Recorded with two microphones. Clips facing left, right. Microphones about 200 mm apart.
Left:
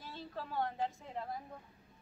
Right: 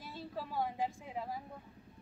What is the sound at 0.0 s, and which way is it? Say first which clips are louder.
A woman's voice: right 2 dB; 10° right (ahead or behind).